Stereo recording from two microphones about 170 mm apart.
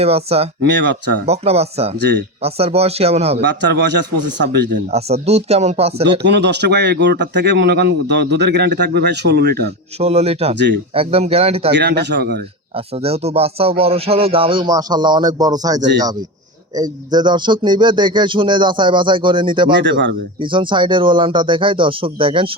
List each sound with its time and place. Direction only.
0.0 s speech: 35° right (ahead or behind)
0.6 s a man's voice: 90° right
1.2 s speech: 40° right (ahead or behind)
2.0 s speech: 85° right
2.4 s speech: 35° right (ahead or behind)
3.4 s a man's voice: 90° right
4.9 s speech: 40° right (ahead or behind)
6.0 s speech: 90° right; by 9.7 s 75° right (ahead or behind)
10.0 s speech: 40° right (ahead or behind)
11.7 s speech: 75° right (ahead or behind)
12.7 s speech: 35° right (ahead or behind)
19.8 s a man's voice: 90° right
20.4 s speech: 30° right (ahead or behind)